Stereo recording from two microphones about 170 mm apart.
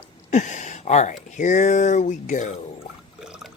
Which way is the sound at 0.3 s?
45° left (ahead or behind).